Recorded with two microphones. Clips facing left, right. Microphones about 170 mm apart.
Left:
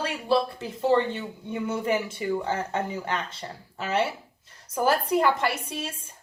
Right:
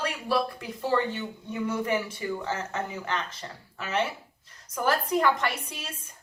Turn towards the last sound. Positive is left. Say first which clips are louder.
# left 6 dB
turn(degrees=30)  # may be behind; listen again after turning